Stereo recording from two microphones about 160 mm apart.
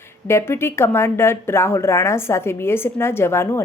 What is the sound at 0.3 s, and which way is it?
Speech, 15° left (ahead or behind).